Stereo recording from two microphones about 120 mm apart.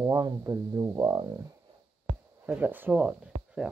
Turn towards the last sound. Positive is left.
turn(degrees=-10)  # may be behind; listen again after turning